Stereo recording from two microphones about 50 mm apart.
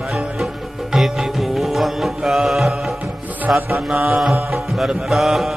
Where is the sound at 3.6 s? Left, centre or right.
Right.